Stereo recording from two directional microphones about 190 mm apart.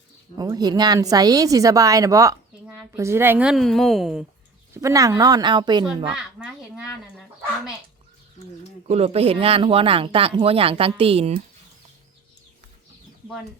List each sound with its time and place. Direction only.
0.3 s a woman's voice: 20° right (ahead or behind); by 4.3 s 5° right (ahead or behind)
4.7 s speech: 15° right (ahead or behind)
6.4 s a woman's voice: 5° right (ahead or behind)
8.9 s speech: 35° right (ahead or behind)